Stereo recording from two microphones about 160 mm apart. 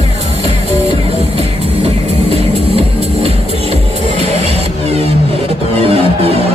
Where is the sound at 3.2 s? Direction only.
40° right (ahead or behind).